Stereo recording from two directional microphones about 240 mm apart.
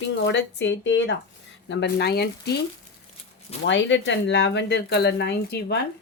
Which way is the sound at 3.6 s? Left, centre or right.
Left.